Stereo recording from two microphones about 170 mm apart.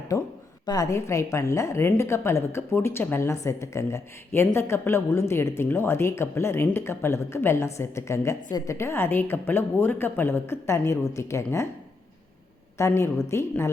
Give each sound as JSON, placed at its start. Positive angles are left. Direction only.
{"t": 0.6, "sound": "a woman's voice", "side_deg": 20}
{"t": 12.7, "sound": "a woman's voice", "side_deg": 15}